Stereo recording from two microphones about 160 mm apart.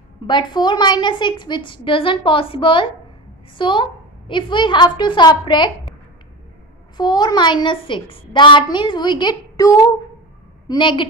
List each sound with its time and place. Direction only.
0.3 s a woman's voice: 30° left (ahead or behind)
7.0 s a child's voice: 25° left (ahead or behind)